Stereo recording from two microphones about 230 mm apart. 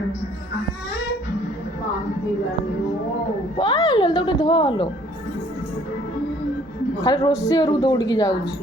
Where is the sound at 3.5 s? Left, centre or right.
Centre.